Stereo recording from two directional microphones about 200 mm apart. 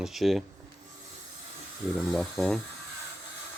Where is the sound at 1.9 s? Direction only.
Centre (ahead or behind).